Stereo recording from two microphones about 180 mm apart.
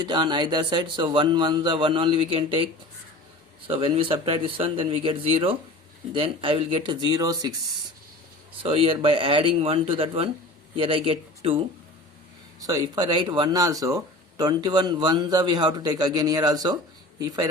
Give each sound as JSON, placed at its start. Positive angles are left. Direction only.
{"t": 0.0, "sound": "speech", "side_deg": -25}
{"t": 3.7, "sound": "speech", "side_deg": -30}
{"t": 8.6, "sound": "speech", "side_deg": -30}